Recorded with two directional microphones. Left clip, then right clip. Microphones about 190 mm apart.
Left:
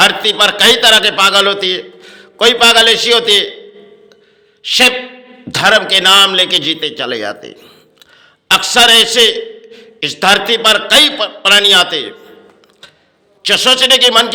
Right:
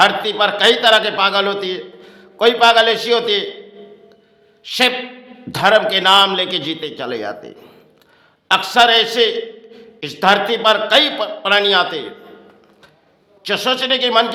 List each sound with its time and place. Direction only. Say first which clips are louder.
0.0 s a man's voice: left 4 dB; 5° left (ahead or behind)
4.6 s a man's voice: left 6 dB; 10° left (ahead or behind)
13.4 s a man's voice: left 8 dB; 10° left (ahead or behind)